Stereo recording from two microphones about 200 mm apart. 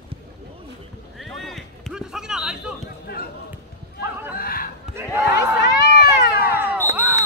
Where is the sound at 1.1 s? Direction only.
Centre (ahead or behind).